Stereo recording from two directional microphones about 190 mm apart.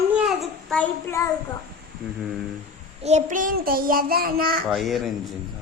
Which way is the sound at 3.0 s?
35° right (ahead or behind).